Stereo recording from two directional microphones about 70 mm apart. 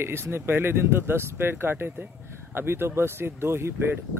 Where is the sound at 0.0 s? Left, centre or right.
Right.